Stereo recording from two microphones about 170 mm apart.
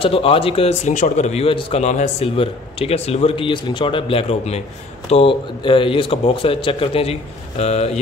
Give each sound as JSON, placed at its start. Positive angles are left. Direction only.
{"t": 0.0, "sound": "a man's voice", "side_deg": 35}